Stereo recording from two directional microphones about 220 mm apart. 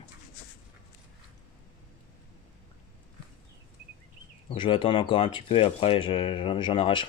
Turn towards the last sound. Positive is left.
turn(degrees=20)  # may be behind; listen again after turning